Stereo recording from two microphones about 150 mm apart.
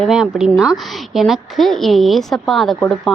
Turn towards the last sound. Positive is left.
turn(degrees=0)  # may be behind; listen again after turning